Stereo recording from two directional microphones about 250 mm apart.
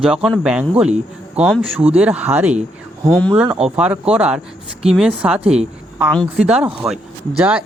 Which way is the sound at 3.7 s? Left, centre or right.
Centre.